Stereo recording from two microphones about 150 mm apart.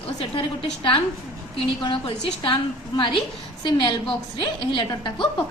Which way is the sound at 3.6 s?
30° left (ahead or behind).